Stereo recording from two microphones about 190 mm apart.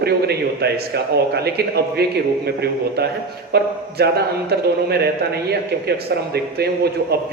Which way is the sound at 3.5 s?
55° right (ahead or behind).